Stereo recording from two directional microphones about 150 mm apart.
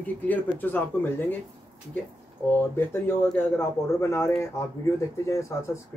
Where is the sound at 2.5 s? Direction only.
15° left (ahead or behind).